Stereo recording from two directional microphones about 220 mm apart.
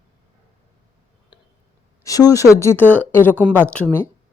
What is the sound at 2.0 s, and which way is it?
A woman's voice, 15° left (ahead or behind).